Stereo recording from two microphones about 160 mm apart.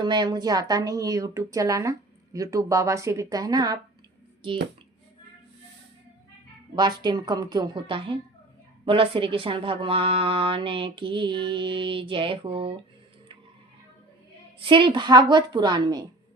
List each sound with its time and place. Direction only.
0.0 s speech: 25° right (ahead or behind)
6.7 s speech: 25° right (ahead or behind)
14.6 s speech: 30° right (ahead or behind)